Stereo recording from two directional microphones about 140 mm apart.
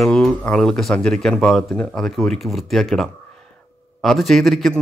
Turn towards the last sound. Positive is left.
turn(degrees=0)  # may be behind; listen again after turning